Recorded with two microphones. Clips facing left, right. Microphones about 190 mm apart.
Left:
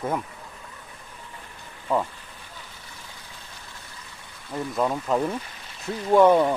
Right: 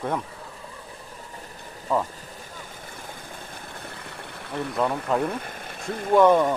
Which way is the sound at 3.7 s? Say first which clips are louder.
Right 7 dB; 60° right (ahead or behind).